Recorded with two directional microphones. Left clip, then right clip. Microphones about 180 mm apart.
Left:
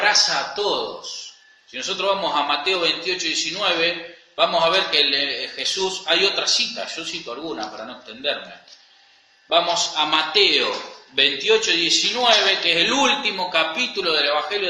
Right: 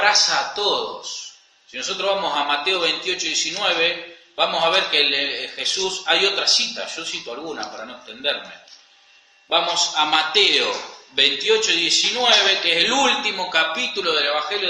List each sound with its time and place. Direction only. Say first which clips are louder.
0.0 s a man's voice: right 1 dB; 10° right (ahead or behind)
9.5 s a man's voice: even; centre (ahead or behind)